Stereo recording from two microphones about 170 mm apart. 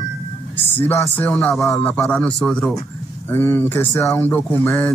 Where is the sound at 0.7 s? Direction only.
10° left (ahead or behind).